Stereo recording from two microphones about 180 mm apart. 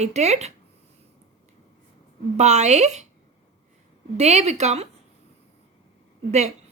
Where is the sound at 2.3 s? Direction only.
40° right (ahead or behind).